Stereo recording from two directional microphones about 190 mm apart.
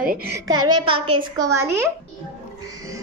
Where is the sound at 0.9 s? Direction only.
25° right (ahead or behind).